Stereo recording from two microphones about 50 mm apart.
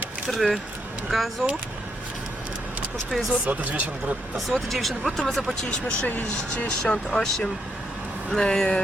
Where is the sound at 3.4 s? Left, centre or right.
Right.